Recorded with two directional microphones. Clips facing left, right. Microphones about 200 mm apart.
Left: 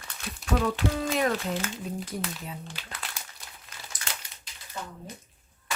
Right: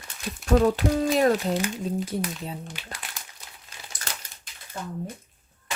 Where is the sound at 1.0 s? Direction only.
35° right (ahead or behind).